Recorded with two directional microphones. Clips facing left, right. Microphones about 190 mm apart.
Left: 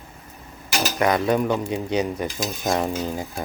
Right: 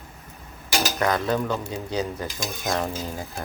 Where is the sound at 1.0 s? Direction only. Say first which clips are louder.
Left 5 dB; 15° left (ahead or behind).